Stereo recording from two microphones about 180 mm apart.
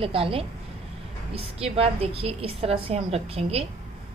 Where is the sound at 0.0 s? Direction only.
30° right (ahead or behind).